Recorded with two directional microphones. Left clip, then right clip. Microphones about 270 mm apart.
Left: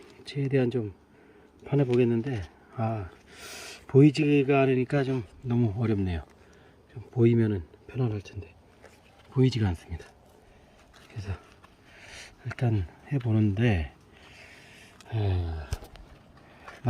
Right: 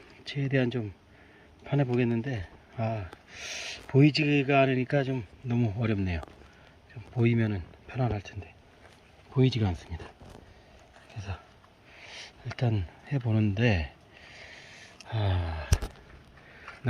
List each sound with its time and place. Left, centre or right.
0.3 s speech: centre
9.3 s speech: centre
12.2 s a sound: centre
15.0 s speech: centre